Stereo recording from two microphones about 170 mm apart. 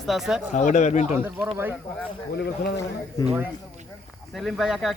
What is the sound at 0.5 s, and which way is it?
Speech, 45° left (ahead or behind).